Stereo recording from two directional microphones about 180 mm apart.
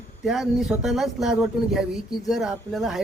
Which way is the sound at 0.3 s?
Centre (ahead or behind).